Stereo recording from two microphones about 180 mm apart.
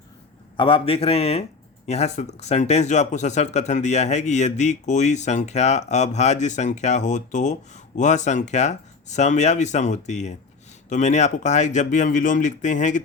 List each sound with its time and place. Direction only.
0.5 s speech: 30° left (ahead or behind)